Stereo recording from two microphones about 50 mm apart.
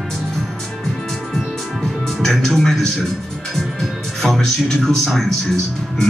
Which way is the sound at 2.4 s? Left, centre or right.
Centre.